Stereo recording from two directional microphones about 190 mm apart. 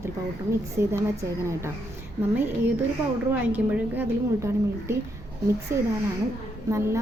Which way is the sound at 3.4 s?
10° right (ahead or behind).